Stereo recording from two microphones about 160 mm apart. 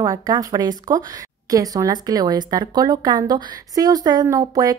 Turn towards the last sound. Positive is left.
turn(degrees=-20)  # may be behind; listen again after turning